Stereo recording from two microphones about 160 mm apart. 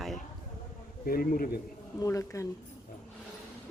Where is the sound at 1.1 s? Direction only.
65° left (ahead or behind).